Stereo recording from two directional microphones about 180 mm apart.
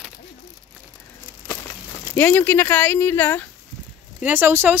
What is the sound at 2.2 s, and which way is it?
Speech, 10° left (ahead or behind).